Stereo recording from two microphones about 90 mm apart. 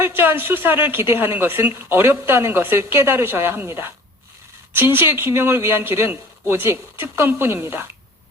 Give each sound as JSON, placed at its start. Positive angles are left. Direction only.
{"t": 0.0, "sound": "a woman's voice", "side_deg": -25}